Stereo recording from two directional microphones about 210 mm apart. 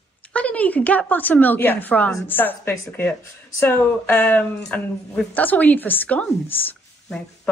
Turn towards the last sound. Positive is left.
turn(degrees=10)  # may be behind; listen again after turning